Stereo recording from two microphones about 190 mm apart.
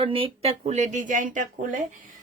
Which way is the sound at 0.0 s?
30° right (ahead or behind).